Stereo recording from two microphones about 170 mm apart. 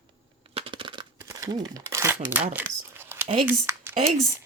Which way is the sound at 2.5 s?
10° right (ahead or behind).